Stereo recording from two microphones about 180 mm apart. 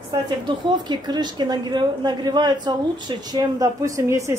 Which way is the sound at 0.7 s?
25° right (ahead or behind).